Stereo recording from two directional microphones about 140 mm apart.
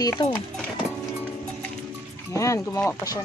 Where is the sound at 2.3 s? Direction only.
20° left (ahead or behind).